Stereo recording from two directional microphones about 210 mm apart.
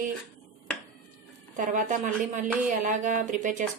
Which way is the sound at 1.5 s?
35° right (ahead or behind).